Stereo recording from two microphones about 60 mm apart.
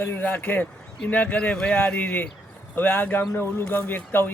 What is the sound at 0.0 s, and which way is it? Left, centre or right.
Speech, left.